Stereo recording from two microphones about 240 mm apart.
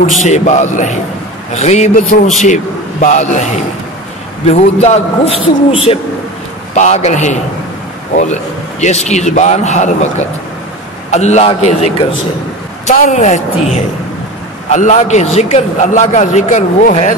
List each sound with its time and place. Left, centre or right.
0.2 s a man's voice: left
4.5 s a man's voice: left
14.7 s a man's voice: left